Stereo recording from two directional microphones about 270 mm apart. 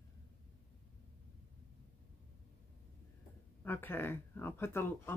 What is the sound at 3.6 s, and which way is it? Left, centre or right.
Speech, centre.